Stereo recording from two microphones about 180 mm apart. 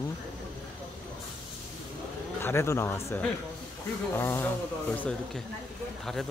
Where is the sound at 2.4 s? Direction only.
15° left (ahead or behind).